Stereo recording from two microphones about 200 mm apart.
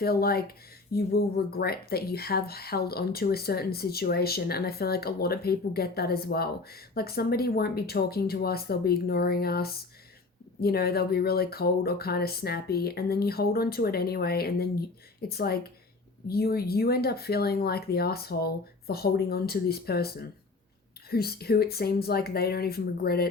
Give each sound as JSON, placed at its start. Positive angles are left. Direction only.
{"t": 0.0, "sound": "speech", "side_deg": 50}